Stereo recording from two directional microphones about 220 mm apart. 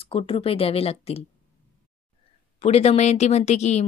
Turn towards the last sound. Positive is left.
turn(degrees=30)  # may be behind; listen again after turning